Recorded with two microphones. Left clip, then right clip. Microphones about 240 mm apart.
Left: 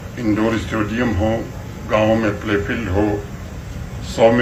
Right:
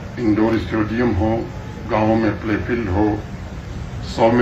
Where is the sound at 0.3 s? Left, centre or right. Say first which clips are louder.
Right 1 dB; left.